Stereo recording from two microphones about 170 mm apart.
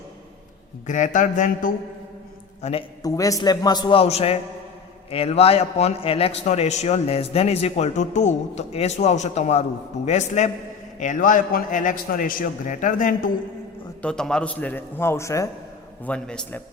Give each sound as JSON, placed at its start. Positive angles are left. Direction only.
{"t": 0.9, "sound": "a man's voice", "side_deg": 50}
{"t": 2.6, "sound": "a man's voice", "side_deg": 40}
{"t": 3.0, "sound": "a man's voice", "side_deg": 20}
{"t": 14.0, "sound": "a man's voice", "side_deg": 5}
{"t": 16.0, "sound": "a man's voice", "side_deg": 5}